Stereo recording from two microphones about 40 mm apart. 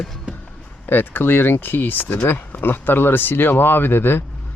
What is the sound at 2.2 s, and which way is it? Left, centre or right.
Speech, left.